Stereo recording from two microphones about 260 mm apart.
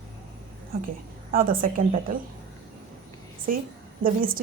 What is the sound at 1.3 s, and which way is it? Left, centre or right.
Speech, right.